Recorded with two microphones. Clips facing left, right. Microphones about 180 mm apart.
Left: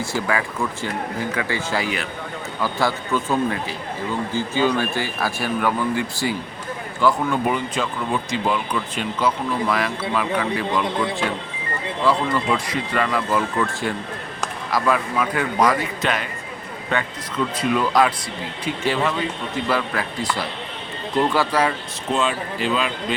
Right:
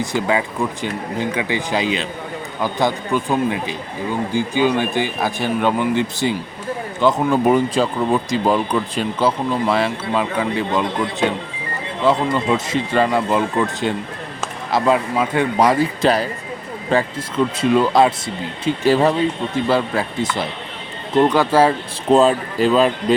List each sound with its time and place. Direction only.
0.0 s speech: 20° right (ahead or behind)
7.3 s speech: 40° right (ahead or behind)
19.6 s speech: 25° right (ahead or behind)
22.1 s speech: 40° right (ahead or behind)